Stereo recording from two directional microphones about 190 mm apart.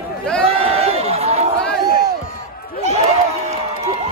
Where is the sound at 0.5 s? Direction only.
30° right (ahead or behind).